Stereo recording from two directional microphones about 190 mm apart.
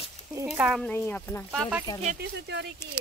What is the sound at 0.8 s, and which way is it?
Speech, 10° left (ahead or behind).